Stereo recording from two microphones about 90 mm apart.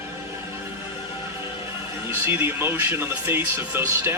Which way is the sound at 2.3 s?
25° right (ahead or behind).